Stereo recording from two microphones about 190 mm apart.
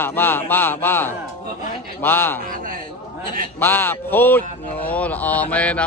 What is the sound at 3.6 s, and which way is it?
Speech, 10° left (ahead or behind).